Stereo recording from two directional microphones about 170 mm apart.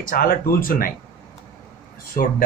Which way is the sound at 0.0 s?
55° left (ahead or behind).